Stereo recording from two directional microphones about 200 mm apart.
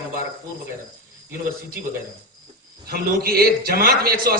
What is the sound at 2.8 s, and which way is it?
A man's voice, 50° right (ahead or behind).